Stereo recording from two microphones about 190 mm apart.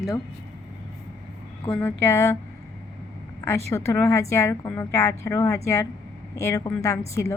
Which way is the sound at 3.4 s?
15° left (ahead or behind).